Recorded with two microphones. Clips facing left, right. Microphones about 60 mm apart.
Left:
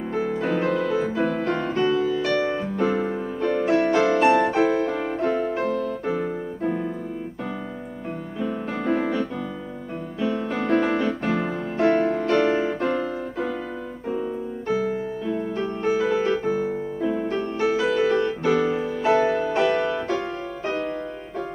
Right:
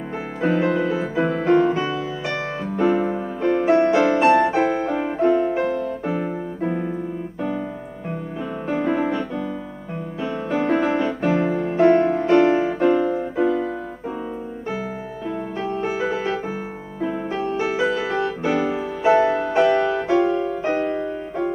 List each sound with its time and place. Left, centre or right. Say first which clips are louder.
0.1 s music: right 2 dB; centre
3.9 s music: right 2 dB; centre
4.8 s music: right 4 dB; centre
5.3 s music: right 5 dB; centre
5.7 s music: right 1 dB; right
8.4 s music: right 3 dB; centre
10.2 s music: right 2 dB; centre
15.3 s music: right 1 dB; centre
17.0 s music: right 2 dB; centre
17.7 s music: left 3 dB; centre
20.1 s music: right 8 dB; centre
20.7 s music: right 5 dB; right